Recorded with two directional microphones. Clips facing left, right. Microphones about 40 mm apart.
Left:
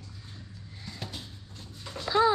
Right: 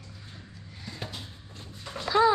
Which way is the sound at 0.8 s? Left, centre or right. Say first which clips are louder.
Right 2 dB; centre.